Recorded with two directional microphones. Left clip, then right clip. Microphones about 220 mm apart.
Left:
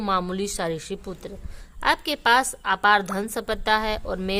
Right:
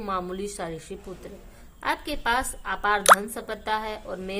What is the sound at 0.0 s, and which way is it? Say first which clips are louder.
Speech: left 5 dB; 40° left (ahead or behind).